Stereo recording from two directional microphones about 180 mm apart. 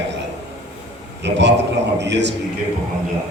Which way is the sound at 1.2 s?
75° right (ahead or behind).